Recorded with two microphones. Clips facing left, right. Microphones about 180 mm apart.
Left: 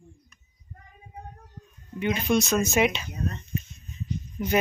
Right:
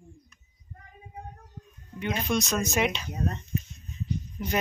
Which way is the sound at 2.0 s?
Centre (ahead or behind).